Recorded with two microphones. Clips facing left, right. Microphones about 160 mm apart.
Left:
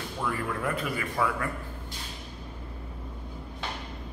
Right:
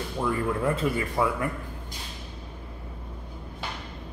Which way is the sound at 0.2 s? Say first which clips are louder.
Right 5 dB; 25° right (ahead or behind).